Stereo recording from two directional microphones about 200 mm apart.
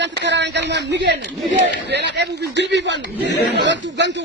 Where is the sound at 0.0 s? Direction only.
60° right (ahead or behind).